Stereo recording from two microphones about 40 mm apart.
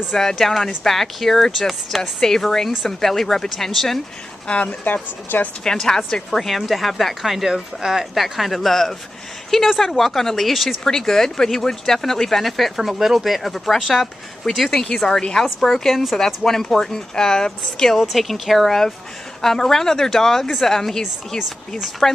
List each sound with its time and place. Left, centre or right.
0.1 s speech: centre
0.4 s speech: centre
4.5 s speech: left
4.8 s speech: left
5.6 s speech: centre
8.1 s speech: centre
10.8 s speech: centre
14.9 s speech: centre
17.9 s speech: centre